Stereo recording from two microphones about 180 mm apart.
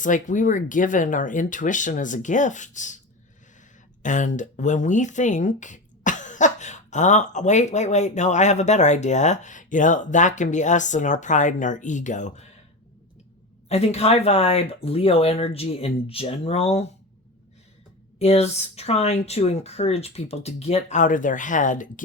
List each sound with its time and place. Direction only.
0.0 s speech: 45° left (ahead or behind)
4.0 s speech: 45° left (ahead or behind)
13.7 s speech: 35° left (ahead or behind)
18.2 s speech: 35° left (ahead or behind)